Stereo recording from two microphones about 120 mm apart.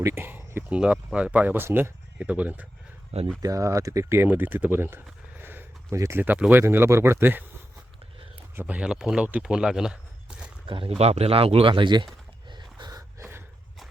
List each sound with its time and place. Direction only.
0.0 s speech: 20° right (ahead or behind)
3.4 s speech: 25° right (ahead or behind)
5.4 s a sound: 15° right (ahead or behind)
6.5 s speech: 20° right (ahead or behind)
8.5 s speech: 10° right (ahead or behind)
10.7 s speech: 45° right (ahead or behind)
10.9 s speech: 60° right (ahead or behind); by 12.0 s 40° right (ahead or behind)
12.5 s gasp: 40° right (ahead or behind)